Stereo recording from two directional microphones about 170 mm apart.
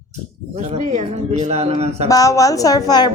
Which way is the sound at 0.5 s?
40° right (ahead or behind).